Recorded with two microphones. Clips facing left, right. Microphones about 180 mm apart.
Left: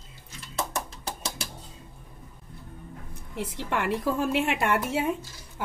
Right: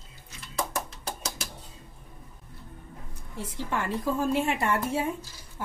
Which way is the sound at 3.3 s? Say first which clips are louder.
Left 2 dB; 70° left (ahead or behind).